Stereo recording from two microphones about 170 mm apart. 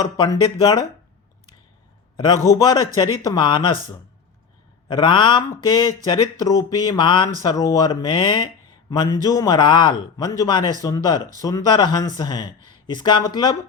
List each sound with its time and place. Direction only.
0.0 s a man's voice: 25° left (ahead or behind)
2.5 s a man's voice: 25° left (ahead or behind)